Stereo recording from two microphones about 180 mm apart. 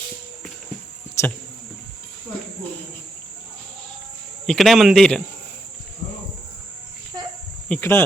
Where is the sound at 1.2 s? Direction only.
15° left (ahead or behind).